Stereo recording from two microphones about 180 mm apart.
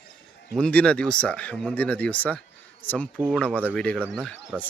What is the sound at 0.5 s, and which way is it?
Speech, 5° left (ahead or behind).